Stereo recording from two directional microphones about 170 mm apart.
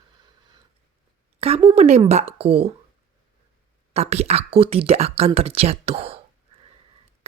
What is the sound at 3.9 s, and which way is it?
Speech, 40° right (ahead or behind).